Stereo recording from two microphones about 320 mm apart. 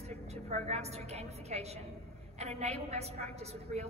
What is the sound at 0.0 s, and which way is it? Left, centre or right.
A woman's voice, centre.